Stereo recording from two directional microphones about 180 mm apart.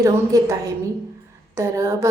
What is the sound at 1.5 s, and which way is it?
Speech, 15° right (ahead or behind).